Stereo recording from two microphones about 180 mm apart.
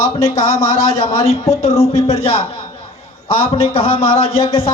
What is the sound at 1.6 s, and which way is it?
A man's voice, 35° left (ahead or behind).